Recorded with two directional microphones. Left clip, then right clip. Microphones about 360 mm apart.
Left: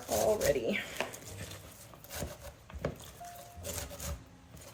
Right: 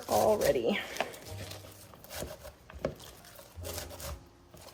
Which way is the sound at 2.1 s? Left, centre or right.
Centre.